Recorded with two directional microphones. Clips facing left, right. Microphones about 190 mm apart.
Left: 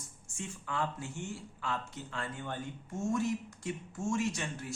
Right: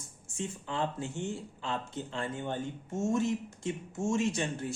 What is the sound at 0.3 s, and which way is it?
Speech, 25° right (ahead or behind).